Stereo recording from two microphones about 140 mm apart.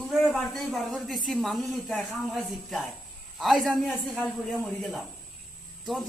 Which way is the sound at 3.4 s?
Centre (ahead or behind).